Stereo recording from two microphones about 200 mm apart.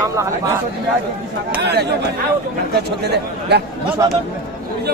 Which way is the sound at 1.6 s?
55° right (ahead or behind).